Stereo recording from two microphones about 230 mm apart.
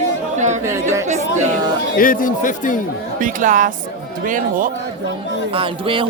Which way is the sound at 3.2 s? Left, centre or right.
Right.